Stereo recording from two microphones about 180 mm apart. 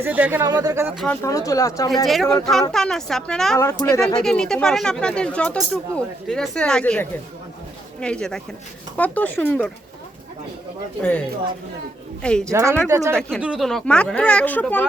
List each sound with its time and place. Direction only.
0.0 s speech: 10° right (ahead or behind)
0.4 s speech: 20° right (ahead or behind)
0.9 s speech: 5° left (ahead or behind)
1.2 s speech: 20° left (ahead or behind)
2.2 s speech: 5° left (ahead or behind)
3.6 s speech: 15° left (ahead or behind)
4.2 s speech: 5° left (ahead or behind)
12.2 s speech: 5° left (ahead or behind)
12.5 s speech: 15° right (ahead or behind)
13.4 s speech: centre (ahead or behind)